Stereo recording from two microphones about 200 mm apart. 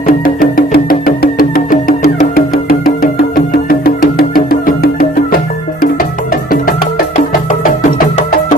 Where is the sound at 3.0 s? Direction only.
50° left (ahead or behind).